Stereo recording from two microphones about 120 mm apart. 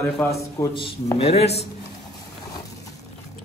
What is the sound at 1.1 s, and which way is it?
Speech, 60° left (ahead or behind).